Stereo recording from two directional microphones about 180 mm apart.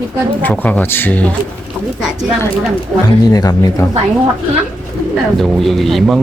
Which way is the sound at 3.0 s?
20° left (ahead or behind).